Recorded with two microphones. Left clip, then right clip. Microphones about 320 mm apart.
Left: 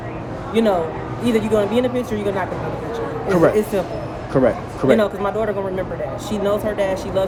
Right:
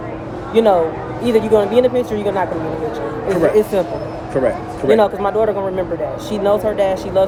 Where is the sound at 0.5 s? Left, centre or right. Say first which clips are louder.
Right 5 dB; centre.